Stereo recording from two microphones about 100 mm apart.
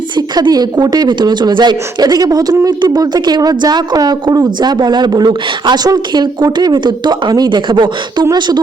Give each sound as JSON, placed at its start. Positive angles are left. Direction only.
{"t": 0.2, "sound": "speech", "side_deg": -40}